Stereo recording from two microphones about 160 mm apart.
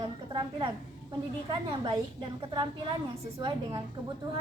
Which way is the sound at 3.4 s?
25° right (ahead or behind).